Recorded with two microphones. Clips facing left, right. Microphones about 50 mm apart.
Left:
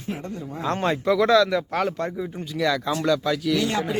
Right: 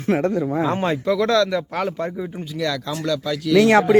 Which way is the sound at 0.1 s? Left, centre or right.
Right.